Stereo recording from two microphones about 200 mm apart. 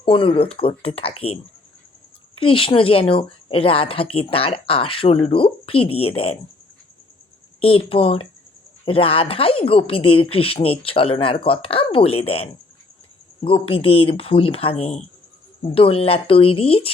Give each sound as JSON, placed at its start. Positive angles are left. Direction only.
{"t": 0.0, "sound": "a woman's voice", "side_deg": 25}
{"t": 2.4, "sound": "a woman's voice", "side_deg": 25}
{"t": 7.6, "sound": "a woman's voice", "side_deg": 30}